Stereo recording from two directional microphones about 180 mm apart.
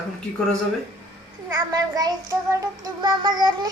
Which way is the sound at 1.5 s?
20° right (ahead or behind).